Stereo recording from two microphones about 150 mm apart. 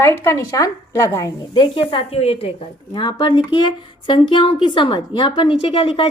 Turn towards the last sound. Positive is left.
turn(degrees=40)  # may be behind; listen again after turning